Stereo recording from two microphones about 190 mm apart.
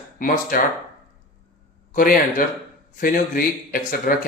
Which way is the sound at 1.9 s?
45° left (ahead or behind).